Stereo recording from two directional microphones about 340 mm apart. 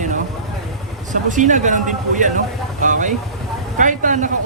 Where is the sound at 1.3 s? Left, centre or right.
Right.